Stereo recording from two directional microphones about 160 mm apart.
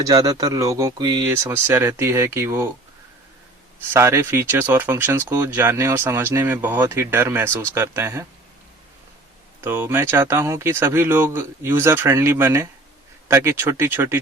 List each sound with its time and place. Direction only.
0.0 s speech: 25° right (ahead or behind)
3.9 s speech: 15° right (ahead or behind)
9.6 s speech: 15° right (ahead or behind)